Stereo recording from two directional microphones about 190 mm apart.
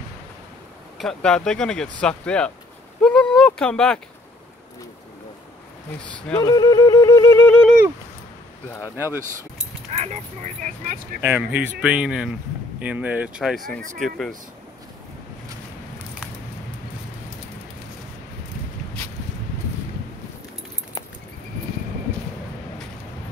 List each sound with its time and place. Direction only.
0.9 s speech: 5° left (ahead or behind)
6.4 s music: 20° left (ahead or behind)
8.9 s speech: 10° right (ahead or behind)
9.8 s speech: 35° right (ahead or behind)
11.2 s speech: 10° right (ahead or behind)